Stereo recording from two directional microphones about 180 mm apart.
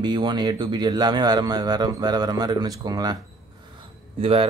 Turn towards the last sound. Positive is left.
turn(degrees=-30)  # may be behind; listen again after turning